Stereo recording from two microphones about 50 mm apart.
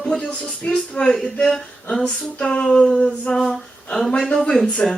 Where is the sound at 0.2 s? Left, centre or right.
Left.